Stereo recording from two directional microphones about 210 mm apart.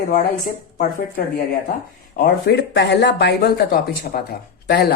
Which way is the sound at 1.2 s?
45° left (ahead or behind).